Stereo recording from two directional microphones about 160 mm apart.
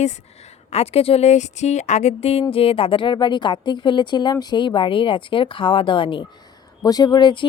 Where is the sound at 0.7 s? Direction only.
40° left (ahead or behind).